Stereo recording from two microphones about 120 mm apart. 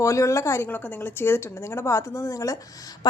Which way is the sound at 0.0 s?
25° left (ahead or behind).